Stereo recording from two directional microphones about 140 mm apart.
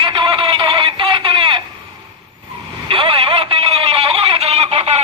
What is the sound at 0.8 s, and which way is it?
Radio, 40° right (ahead or behind).